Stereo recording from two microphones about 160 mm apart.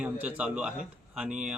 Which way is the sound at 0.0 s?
10° right (ahead or behind).